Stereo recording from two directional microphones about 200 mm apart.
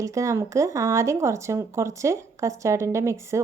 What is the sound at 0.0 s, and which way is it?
Speech, 15° right (ahead or behind).